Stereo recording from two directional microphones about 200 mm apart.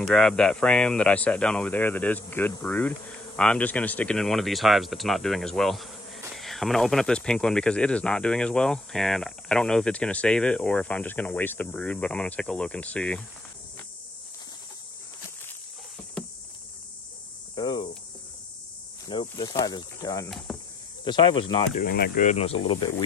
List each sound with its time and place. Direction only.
0.0 s speech: centre (ahead or behind)
17.6 s cricket: 20° left (ahead or behind)
19.0 s speech: 20° left (ahead or behind)
20.2 s speech: centre (ahead or behind)
21.0 s speech: 25° left (ahead or behind)
21.7 s speech: 50° left (ahead or behind); by 23.0 s 20° left (ahead or behind)